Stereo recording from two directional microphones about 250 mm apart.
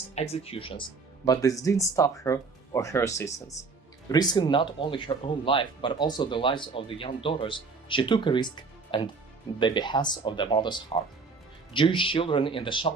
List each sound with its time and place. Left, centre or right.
0.2 s speech: left